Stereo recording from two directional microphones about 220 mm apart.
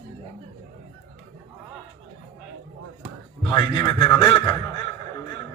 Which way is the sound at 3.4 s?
20° left (ahead or behind).